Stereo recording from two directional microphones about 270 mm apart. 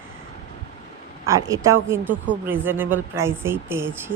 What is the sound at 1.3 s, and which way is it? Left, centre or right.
Speech, centre.